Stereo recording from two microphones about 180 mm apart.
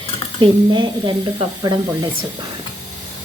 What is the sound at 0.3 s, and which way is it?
Speech, 25° right (ahead or behind).